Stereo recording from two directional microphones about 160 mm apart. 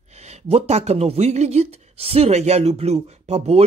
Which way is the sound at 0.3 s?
40° right (ahead or behind).